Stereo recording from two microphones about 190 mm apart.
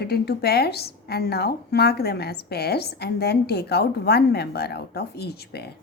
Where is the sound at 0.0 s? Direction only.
55° left (ahead or behind).